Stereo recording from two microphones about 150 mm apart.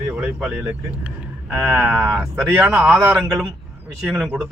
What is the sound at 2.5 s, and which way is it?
Speech, 15° right (ahead or behind).